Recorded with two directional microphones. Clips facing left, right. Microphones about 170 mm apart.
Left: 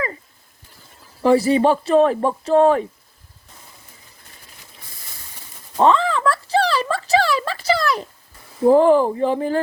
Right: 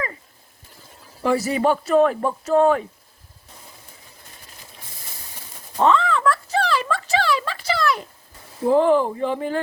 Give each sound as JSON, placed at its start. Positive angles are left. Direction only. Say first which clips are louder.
{"t": 1.2, "sound": "speech", "louder": "left 5 dB", "side_deg": 30}
{"t": 5.8, "sound": "a sound", "louder": "left 2 dB", "side_deg": 35}
{"t": 8.7, "sound": "speech", "louder": "left 3 dB", "side_deg": 40}